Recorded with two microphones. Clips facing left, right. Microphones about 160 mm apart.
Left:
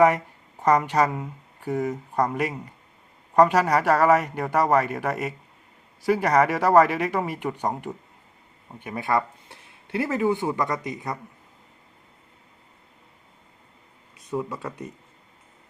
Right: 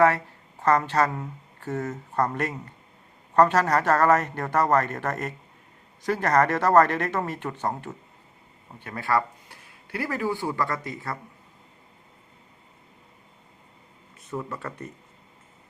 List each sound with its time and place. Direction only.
0.6 s speech: 15° left (ahead or behind)
14.3 s speech: 15° left (ahead or behind)